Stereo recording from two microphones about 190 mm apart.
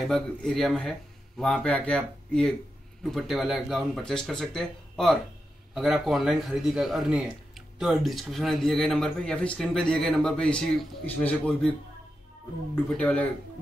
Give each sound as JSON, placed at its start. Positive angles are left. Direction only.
{"t": 0.1, "sound": "speech", "side_deg": 5}
{"t": 12.7, "sound": "speech", "side_deg": 5}